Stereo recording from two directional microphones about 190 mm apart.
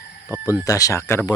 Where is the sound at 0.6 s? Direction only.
15° left (ahead or behind).